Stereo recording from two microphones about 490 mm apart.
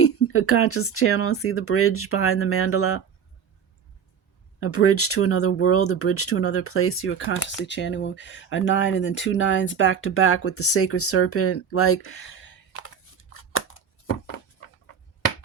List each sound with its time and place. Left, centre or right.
0.0 s speech: left
4.6 s speech: left